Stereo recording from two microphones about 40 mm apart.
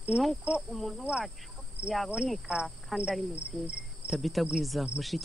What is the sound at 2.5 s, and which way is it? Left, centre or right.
Cricket, right.